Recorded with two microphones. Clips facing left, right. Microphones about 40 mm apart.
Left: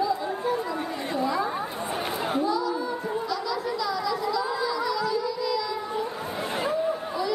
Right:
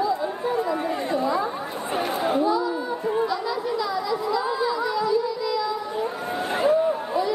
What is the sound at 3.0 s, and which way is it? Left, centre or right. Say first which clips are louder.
Chatter: right 5 dB; right.